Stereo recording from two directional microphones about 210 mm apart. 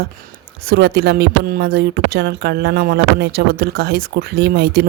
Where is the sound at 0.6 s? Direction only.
50° right (ahead or behind).